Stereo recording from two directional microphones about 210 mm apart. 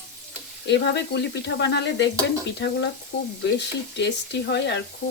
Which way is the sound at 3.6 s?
55° left (ahead or behind).